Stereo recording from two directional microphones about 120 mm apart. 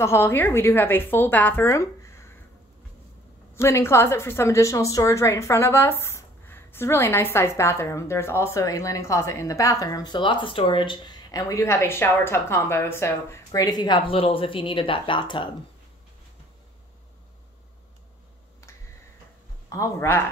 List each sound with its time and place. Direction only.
0.0 s a woman's voice: 20° left (ahead or behind)
3.5 s a woman's voice: 20° left (ahead or behind); by 15.5 s 40° left (ahead or behind)
19.7 s a woman's voice: 25° left (ahead or behind)